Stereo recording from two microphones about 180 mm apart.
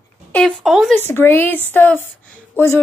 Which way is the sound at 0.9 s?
10° left (ahead or behind).